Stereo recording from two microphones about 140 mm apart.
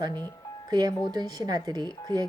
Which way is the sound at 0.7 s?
30° right (ahead or behind).